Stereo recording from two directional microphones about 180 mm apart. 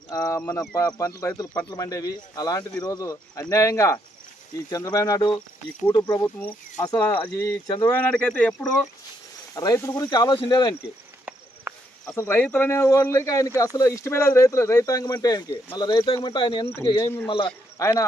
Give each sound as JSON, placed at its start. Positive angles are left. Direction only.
{"t": 0.1, "sound": "speech", "side_deg": 15}
{"t": 6.2, "sound": "speech", "side_deg": 10}
{"t": 6.8, "sound": "speech", "side_deg": 25}
{"t": 8.1, "sound": "speech", "side_deg": 5}
{"t": 12.1, "sound": "speech", "side_deg": 10}
{"t": 16.6, "sound": "speech", "side_deg": 15}
{"t": 17.2, "sound": "speech", "side_deg": 30}
{"t": 17.7, "sound": "speech", "side_deg": 15}